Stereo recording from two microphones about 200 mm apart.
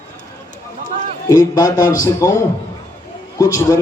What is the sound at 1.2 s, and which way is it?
A man's voice, 15° left (ahead or behind).